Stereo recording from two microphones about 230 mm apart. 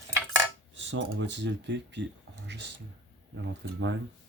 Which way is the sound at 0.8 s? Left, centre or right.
Right.